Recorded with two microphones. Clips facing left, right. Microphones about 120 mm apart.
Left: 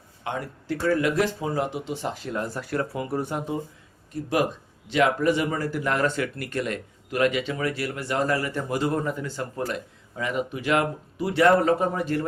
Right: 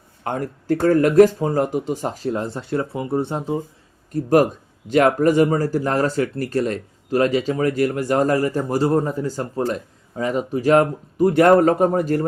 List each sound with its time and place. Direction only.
0.3 s speech: 45° right (ahead or behind)
2.3 s speech: 25° right (ahead or behind)
4.1 s speech: 45° right (ahead or behind)